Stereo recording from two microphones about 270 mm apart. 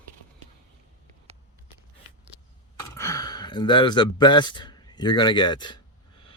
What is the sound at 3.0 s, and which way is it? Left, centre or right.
Speech, centre.